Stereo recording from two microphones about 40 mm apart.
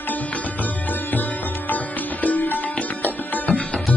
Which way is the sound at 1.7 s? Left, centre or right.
Left.